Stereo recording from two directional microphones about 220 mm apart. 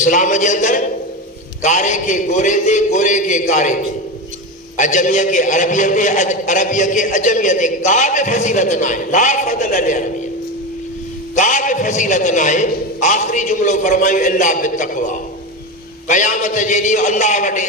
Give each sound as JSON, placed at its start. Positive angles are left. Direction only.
{"t": 0.0, "sound": "a man's voice", "side_deg": 35}
{"t": 4.8, "sound": "a man's voice", "side_deg": 35}
{"t": 11.3, "sound": "a man's voice", "side_deg": 35}